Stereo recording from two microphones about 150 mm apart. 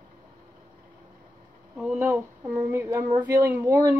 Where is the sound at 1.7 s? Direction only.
5° right (ahead or behind).